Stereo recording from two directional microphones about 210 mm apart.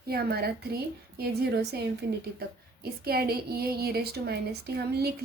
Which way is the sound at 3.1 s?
45° right (ahead or behind).